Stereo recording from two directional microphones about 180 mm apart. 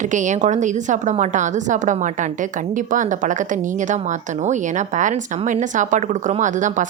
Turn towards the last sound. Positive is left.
turn(degrees=-45)  # may be behind; listen again after turning